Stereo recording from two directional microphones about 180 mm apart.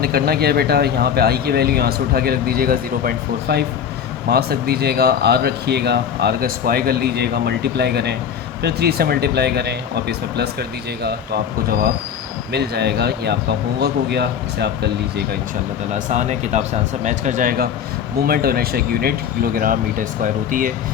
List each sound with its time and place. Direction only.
0.0 s speech: 60° right (ahead or behind)
15.9 s speech: 40° right (ahead or behind)